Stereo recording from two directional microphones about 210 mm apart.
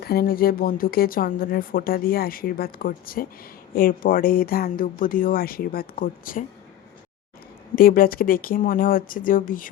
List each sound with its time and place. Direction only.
0.0 s a woman's voice: 45° left (ahead or behind)
7.8 s speech: 45° left (ahead or behind)